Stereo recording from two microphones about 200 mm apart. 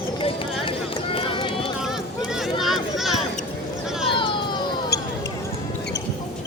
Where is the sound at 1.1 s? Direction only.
25° left (ahead or behind).